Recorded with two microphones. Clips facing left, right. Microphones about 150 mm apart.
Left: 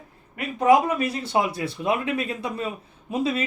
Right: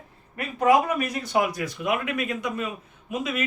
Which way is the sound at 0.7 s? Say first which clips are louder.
Left 2 dB; 30° left (ahead or behind).